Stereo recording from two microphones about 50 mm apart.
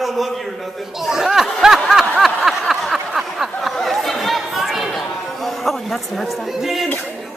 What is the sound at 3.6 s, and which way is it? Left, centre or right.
Chatter, centre.